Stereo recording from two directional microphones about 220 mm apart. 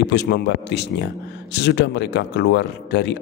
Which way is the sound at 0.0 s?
50° left (ahead or behind).